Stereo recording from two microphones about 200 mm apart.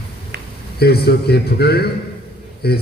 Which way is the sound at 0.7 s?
50° left (ahead or behind).